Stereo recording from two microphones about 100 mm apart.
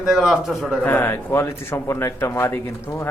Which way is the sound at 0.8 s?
20° left (ahead or behind).